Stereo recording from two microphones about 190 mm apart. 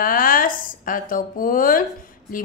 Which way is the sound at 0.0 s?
45° left (ahead or behind).